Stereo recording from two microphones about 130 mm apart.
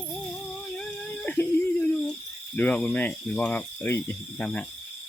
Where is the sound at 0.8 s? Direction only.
10° left (ahead or behind).